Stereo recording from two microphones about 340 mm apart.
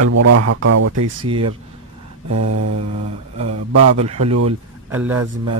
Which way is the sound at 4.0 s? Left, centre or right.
Centre.